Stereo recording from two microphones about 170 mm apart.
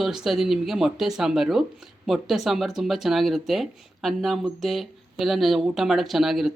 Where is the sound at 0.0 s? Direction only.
Centre (ahead or behind).